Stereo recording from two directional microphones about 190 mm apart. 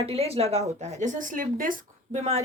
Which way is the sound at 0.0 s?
30° right (ahead or behind).